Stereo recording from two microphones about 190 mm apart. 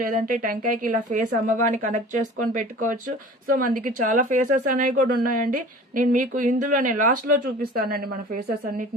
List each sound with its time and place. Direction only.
0.1 s speech: 45° right (ahead or behind)